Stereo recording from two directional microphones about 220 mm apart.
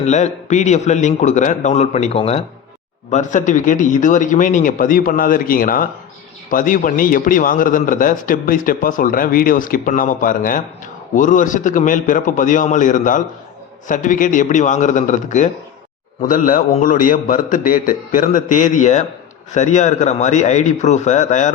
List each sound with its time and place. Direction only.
0.0 s a man's voice: 30° left (ahead or behind)